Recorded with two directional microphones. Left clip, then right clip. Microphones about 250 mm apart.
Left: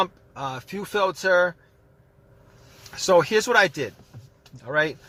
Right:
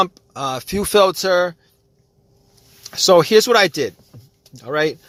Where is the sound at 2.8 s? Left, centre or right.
Right.